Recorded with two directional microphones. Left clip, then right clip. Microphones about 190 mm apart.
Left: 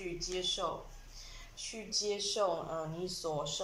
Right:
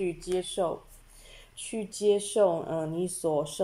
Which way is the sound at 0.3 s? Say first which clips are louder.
Right 5 dB; 40° right (ahead or behind).